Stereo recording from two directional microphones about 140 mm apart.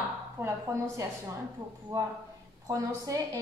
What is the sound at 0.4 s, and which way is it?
A woman's voice, 20° right (ahead or behind).